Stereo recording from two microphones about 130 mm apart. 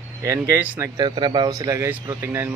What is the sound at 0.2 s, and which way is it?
Speech, 20° right (ahead or behind).